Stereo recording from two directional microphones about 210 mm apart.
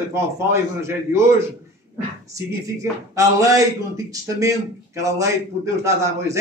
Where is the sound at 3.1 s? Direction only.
15° right (ahead or behind).